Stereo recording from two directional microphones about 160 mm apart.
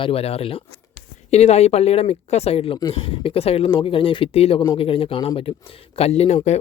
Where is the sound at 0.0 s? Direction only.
40° left (ahead or behind).